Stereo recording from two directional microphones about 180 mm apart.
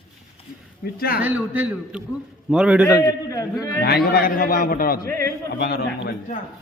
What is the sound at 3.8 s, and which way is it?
A man's voice, 60° left (ahead or behind).